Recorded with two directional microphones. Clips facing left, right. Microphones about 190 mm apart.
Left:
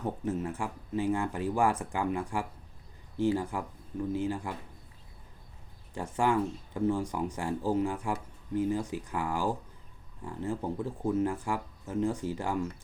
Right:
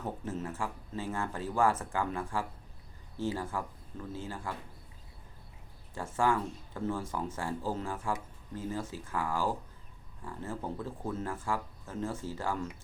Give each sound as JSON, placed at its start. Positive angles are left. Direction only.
{"t": 0.0, "sound": "speech", "side_deg": 15}
{"t": 5.9, "sound": "speech", "side_deg": 15}